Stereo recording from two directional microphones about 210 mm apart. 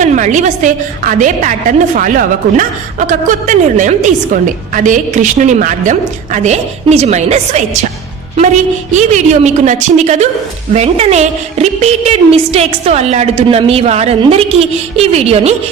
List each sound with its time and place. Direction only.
0.0 s a woman's voice: 35° right (ahead or behind)
8.9 s a woman's voice: 35° right (ahead or behind)